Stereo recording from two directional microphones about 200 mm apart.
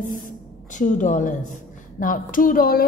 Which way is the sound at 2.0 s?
40° left (ahead or behind).